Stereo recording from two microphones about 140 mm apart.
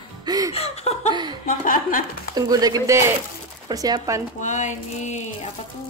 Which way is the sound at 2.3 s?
30° right (ahead or behind).